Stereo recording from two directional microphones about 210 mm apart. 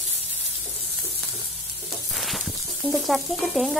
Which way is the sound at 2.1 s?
Centre (ahead or behind).